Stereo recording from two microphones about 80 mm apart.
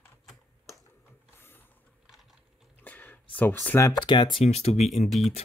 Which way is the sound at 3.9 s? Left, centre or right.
Left.